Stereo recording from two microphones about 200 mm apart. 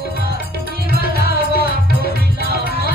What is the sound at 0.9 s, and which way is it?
Music, 50° left (ahead or behind).